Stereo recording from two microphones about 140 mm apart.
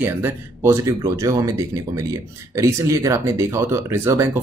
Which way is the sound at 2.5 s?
20° right (ahead or behind).